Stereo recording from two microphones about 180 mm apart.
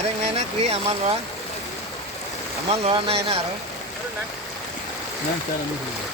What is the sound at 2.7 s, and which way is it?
Speech, 35° right (ahead or behind).